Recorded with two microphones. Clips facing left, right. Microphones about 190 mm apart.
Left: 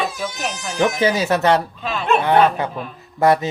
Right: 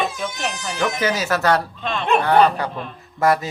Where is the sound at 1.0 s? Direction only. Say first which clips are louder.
Left 2 dB; 25° left (ahead or behind).